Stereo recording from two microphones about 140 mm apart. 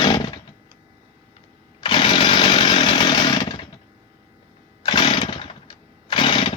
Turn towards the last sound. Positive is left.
turn(degrees=35)  # may be behind; listen again after turning